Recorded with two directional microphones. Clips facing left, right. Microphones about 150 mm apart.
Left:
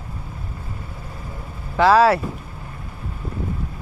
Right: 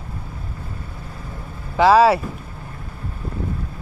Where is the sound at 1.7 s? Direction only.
5° right (ahead or behind).